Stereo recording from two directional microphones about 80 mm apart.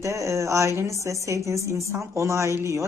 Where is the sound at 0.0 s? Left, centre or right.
Right.